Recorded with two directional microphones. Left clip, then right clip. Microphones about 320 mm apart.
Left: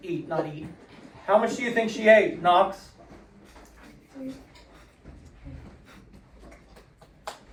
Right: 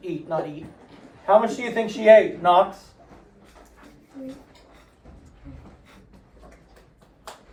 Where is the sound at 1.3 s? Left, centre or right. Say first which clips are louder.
Right 4 dB; right.